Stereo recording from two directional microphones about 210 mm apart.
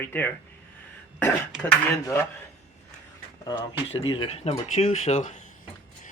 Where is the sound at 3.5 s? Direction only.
25° left (ahead or behind).